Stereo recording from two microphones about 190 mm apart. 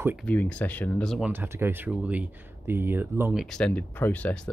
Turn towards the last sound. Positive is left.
turn(degrees=10)  # may be behind; listen again after turning